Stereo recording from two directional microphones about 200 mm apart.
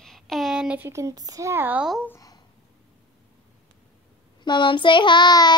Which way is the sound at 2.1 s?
15° left (ahead or behind).